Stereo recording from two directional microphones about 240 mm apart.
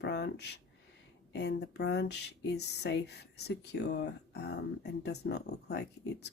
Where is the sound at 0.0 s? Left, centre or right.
Left.